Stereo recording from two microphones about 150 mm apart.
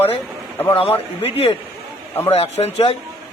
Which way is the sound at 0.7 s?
40° left (ahead or behind).